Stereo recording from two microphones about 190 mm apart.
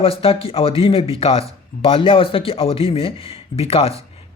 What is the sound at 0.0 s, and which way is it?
Speech, 30° left (ahead or behind).